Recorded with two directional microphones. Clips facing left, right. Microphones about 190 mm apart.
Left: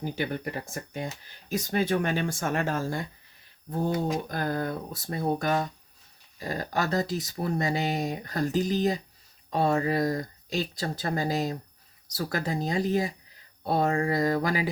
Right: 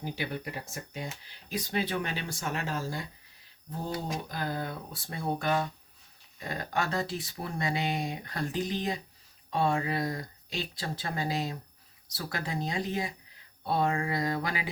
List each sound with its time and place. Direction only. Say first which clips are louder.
0.0 s speech: left 5 dB; 50° left (ahead or behind)